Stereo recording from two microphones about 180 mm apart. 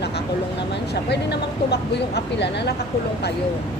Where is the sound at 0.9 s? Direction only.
65° left (ahead or behind).